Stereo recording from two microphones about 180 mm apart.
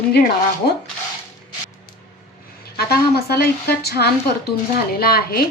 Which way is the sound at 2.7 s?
60° left (ahead or behind).